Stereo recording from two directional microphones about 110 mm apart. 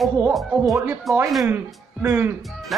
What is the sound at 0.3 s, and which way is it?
Speech, centre (ahead or behind).